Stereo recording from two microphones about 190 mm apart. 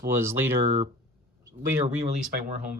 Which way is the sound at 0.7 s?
40° right (ahead or behind).